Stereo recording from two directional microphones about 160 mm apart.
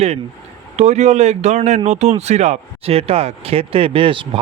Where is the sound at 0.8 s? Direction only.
45° right (ahead or behind).